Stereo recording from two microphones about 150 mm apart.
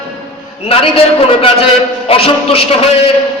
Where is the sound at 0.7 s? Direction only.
40° left (ahead or behind).